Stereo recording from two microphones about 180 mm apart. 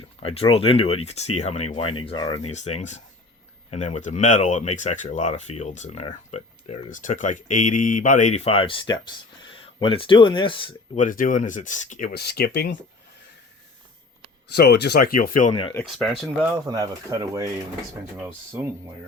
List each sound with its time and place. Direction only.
0.2 s speech: 30° left (ahead or behind)
2.4 s speech: 40° left (ahead or behind)
10.9 s speech: 45° left (ahead or behind); by 12.7 s 65° left (ahead or behind)
14.5 s speech: 65° left (ahead or behind); by 15.7 s 35° left (ahead or behind)
15.9 s speech: centre (ahead or behind)
16.6 s speech: 20° right (ahead or behind)